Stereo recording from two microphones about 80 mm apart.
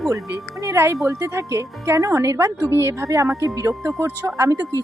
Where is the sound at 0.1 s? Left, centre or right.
Right.